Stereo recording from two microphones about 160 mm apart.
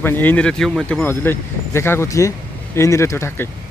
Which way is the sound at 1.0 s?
15° left (ahead or behind).